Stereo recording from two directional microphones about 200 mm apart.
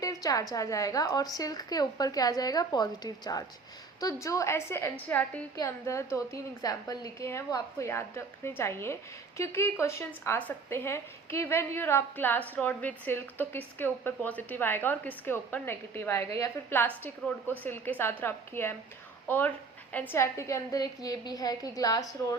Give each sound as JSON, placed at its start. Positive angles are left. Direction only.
{"t": 0.0, "sound": "a woman's voice", "side_deg": 15}